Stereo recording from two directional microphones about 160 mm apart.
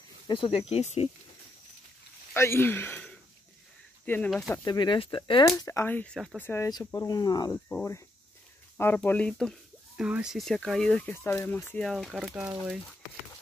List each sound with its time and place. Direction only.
0.3 s speech: 35° left (ahead or behind)
2.3 s speech: 15° left (ahead or behind)
4.6 s speech: 30° left (ahead or behind)
7.5 s speech: 15° left (ahead or behind); by 12.8 s 5° right (ahead or behind)